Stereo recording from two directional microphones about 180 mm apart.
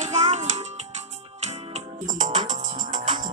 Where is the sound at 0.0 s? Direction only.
40° right (ahead or behind).